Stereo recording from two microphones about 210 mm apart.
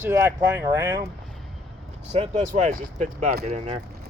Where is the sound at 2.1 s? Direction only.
35° right (ahead or behind).